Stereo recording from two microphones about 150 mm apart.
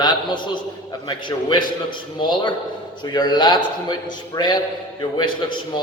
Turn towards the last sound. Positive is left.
turn(degrees=30)  # may be behind; listen again after turning